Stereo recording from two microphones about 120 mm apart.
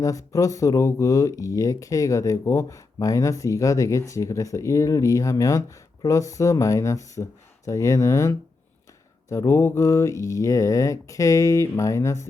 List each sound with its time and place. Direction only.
0.0 s speech: 30° left (ahead or behind)